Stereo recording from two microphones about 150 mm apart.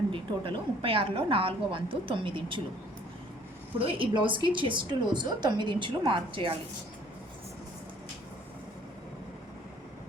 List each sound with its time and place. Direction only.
0.1 s speech: 35° right (ahead or behind)
3.8 s speech: 35° right (ahead or behind)